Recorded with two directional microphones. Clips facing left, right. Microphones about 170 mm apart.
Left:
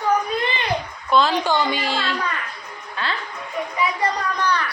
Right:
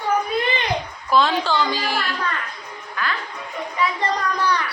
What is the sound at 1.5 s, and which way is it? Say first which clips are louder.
Speech: left 1 dB; 25° left (ahead or behind).